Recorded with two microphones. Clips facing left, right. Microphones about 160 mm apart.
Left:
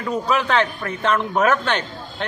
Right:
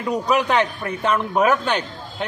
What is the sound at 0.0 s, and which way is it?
A man's voice, 15° right (ahead or behind).